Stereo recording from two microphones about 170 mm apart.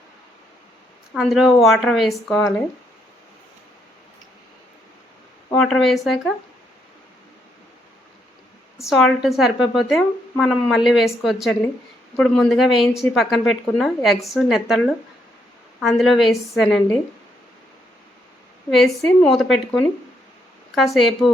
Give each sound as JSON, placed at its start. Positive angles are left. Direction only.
{"t": 1.1, "sound": "a woman's voice", "side_deg": 0}
{"t": 5.5, "sound": "a woman's voice", "side_deg": 5}
{"t": 8.9, "sound": "a woman's voice", "side_deg": 0}
{"t": 18.7, "sound": "a woman's voice", "side_deg": 0}